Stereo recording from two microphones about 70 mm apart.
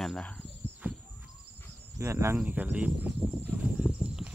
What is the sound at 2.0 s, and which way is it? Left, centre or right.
Speech, right.